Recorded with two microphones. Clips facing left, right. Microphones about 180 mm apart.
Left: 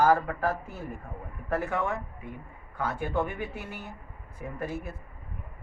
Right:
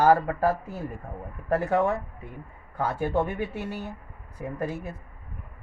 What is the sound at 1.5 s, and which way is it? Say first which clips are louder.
Speech: right 6 dB; 40° right (ahead or behind).